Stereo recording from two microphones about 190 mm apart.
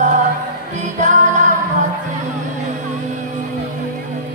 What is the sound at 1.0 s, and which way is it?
Music, 40° right (ahead or behind).